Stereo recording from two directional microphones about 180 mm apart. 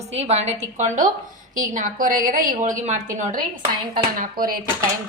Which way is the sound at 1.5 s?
45° right (ahead or behind).